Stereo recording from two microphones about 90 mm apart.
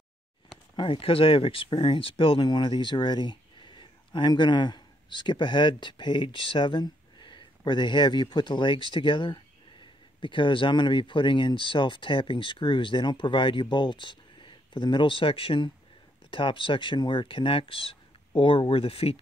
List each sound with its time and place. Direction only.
0.7 s speech: 75° left (ahead or behind); by 19.1 s 90° left